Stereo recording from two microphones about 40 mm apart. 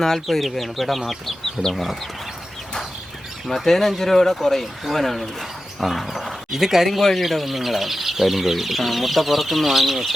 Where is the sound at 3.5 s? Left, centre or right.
Centre.